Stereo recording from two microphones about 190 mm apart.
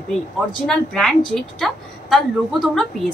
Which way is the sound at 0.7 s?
5° left (ahead or behind).